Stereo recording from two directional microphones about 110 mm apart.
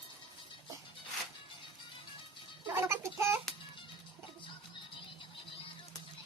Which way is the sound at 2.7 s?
25° right (ahead or behind).